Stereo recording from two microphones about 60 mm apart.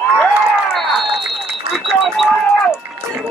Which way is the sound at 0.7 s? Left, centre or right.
Centre.